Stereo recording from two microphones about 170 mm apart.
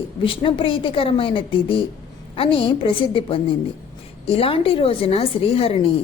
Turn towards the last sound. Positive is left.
turn(degrees=35)  # may be behind; listen again after turning